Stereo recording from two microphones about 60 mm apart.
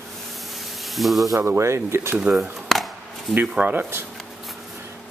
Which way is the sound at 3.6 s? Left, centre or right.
Right.